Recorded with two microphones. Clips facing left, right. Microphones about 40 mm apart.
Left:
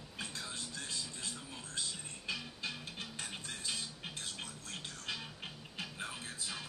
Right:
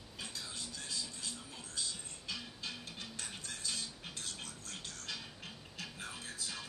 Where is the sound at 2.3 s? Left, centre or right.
Left.